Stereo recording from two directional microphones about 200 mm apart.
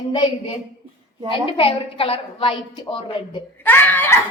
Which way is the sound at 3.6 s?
10° left (ahead or behind).